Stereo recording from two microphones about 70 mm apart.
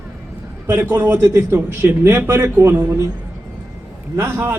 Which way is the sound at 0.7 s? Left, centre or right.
Right.